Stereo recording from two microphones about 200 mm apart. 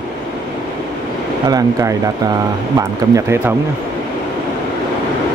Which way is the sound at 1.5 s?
15° right (ahead or behind).